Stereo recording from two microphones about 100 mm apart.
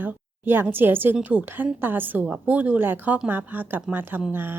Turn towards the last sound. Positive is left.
turn(degrees=-20)  # may be behind; listen again after turning